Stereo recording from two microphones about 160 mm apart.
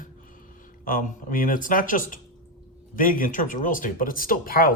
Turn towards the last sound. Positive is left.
turn(degrees=65)  # may be behind; listen again after turning